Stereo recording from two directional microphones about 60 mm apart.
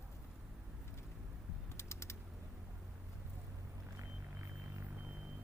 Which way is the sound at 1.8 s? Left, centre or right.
Left.